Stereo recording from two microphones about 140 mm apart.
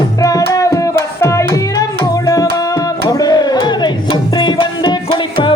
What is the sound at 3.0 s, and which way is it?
Music, 30° left (ahead or behind).